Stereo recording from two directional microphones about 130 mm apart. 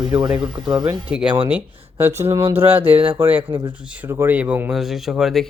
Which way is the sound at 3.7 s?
10° right (ahead or behind).